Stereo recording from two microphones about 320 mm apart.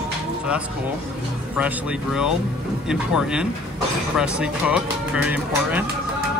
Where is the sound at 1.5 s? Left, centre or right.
Centre.